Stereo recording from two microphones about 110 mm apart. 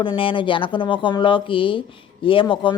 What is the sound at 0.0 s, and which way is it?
Speech, 50° left (ahead or behind).